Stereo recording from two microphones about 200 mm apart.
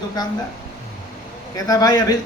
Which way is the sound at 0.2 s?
20° left (ahead or behind).